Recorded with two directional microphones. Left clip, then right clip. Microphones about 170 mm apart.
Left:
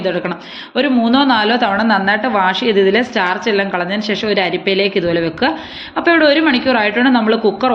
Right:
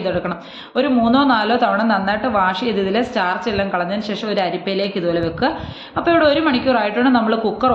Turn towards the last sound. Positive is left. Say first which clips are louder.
# left 3 dB
turn(degrees=10)  # may be behind; listen again after turning